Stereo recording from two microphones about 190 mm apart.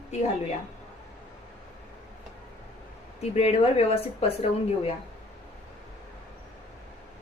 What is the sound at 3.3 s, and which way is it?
Speech, 35° left (ahead or behind).